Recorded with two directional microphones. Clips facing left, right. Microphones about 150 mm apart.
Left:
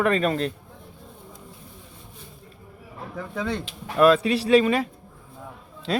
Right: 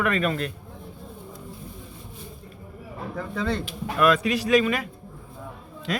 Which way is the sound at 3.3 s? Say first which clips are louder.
Right 1 dB; 15° left (ahead or behind).